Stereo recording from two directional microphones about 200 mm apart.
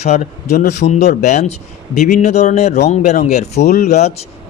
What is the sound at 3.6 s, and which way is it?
Speech, 55° left (ahead or behind).